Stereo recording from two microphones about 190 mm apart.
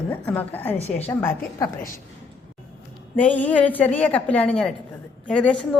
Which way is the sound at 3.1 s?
10° left (ahead or behind).